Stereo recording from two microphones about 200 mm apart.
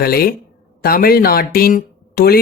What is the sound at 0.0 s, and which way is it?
Speech, 50° left (ahead or behind).